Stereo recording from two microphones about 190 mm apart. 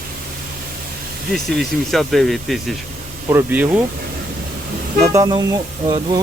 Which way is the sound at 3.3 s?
10° right (ahead or behind).